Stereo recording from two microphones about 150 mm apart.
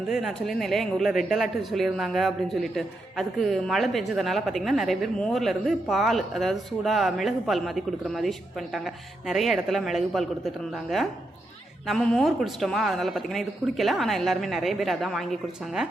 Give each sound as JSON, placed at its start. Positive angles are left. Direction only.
{"t": 0.1, "sound": "speech", "side_deg": 0}